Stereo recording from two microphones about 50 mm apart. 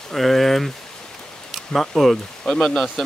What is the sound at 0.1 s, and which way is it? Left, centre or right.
Speech, centre.